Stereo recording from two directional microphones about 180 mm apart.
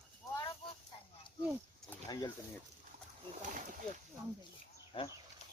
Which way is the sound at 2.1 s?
20° left (ahead or behind).